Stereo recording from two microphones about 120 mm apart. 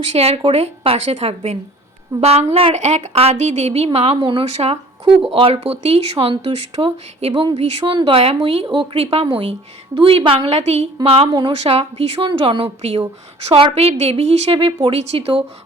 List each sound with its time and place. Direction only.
0.2 s a woman's voice: 60° right (ahead or behind)
8.6 s a woman's voice: 40° right (ahead or behind)
11.3 s a woman's voice: 45° right (ahead or behind)